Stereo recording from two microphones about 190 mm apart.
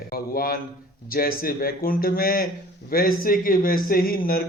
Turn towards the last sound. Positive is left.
turn(degrees=50)  # may be behind; listen again after turning